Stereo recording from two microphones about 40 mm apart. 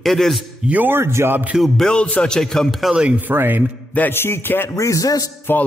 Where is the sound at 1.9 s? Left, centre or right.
Left.